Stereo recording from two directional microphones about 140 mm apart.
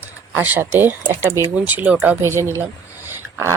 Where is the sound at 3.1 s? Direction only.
20° right (ahead or behind).